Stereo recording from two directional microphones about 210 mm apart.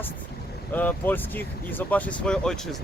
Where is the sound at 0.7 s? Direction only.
10° left (ahead or behind).